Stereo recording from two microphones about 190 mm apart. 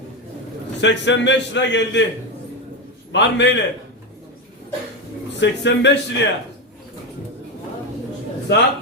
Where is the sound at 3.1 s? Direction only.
70° left (ahead or behind).